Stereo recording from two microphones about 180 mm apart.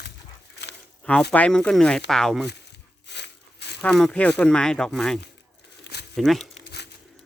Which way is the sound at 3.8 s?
5° left (ahead or behind).